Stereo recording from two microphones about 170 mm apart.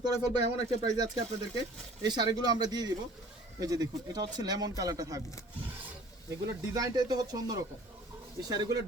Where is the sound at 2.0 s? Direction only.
25° right (ahead or behind).